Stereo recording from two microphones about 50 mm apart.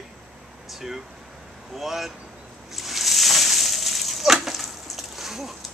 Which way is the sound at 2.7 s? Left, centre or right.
Centre.